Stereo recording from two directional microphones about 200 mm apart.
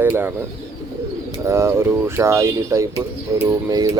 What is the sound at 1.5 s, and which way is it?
Speech, 15° right (ahead or behind).